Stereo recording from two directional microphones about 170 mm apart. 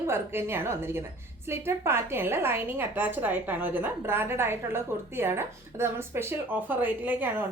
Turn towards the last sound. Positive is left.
turn(degrees=-10)  # may be behind; listen again after turning